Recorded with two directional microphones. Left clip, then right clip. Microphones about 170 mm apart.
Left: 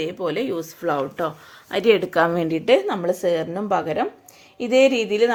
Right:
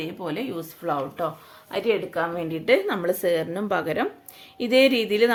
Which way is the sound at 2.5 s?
25° left (ahead or behind).